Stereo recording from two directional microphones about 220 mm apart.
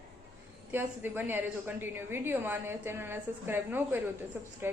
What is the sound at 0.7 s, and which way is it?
A woman's voice, 10° right (ahead or behind).